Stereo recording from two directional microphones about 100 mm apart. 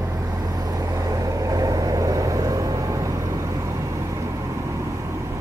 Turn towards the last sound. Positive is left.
turn(degrees=-30)  # may be behind; listen again after turning